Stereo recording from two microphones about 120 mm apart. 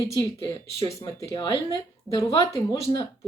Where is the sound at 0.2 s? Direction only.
30° left (ahead or behind).